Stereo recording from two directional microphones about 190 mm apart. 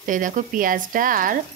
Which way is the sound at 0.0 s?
40° right (ahead or behind).